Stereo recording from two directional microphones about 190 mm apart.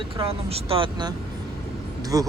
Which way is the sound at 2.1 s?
20° right (ahead or behind).